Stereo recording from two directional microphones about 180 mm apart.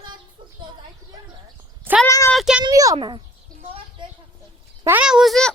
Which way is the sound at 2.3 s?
Centre (ahead or behind).